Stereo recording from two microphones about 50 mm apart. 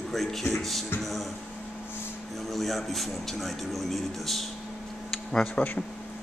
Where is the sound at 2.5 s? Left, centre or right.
Centre.